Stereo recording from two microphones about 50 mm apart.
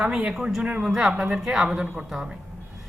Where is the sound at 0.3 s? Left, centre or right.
Centre.